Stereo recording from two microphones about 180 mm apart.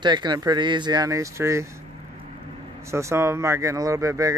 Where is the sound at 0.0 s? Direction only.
25° right (ahead or behind).